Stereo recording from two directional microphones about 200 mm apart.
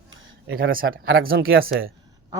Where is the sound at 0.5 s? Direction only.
45° right (ahead or behind).